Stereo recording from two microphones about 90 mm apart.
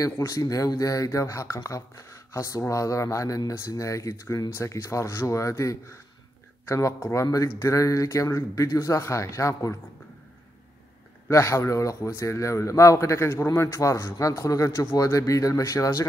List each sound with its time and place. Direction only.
0.3 s speech: 40° left (ahead or behind)
11.2 s speech: 35° left (ahead or behind)